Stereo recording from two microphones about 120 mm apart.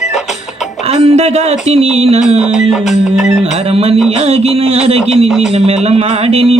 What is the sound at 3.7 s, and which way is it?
Speech, 55° right (ahead or behind).